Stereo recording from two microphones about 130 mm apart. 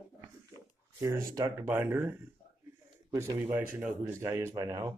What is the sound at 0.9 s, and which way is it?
Speech, 20° right (ahead or behind).